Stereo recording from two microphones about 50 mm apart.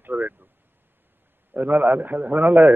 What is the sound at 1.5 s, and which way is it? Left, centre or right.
A man's voice, right.